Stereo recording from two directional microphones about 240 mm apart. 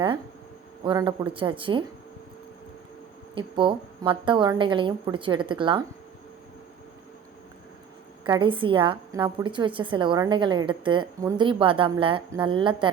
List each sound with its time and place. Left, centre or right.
0.9 s a woman's voice: centre
3.3 s a woman's voice: right
8.3 s a woman's voice: right